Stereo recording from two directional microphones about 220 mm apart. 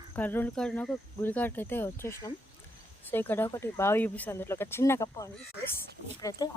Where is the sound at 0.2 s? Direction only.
10° left (ahead or behind).